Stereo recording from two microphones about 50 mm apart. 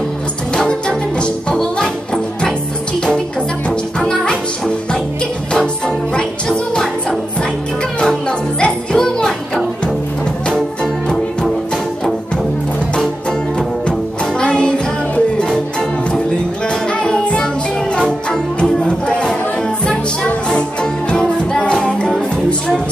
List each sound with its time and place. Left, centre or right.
0.6 s music: centre
4.0 s music: centre
6.1 s music: centre
8.0 s music: centre
10.5 s music: centre
14.4 s music: centre
17.0 s music: centre
20.4 s music: centre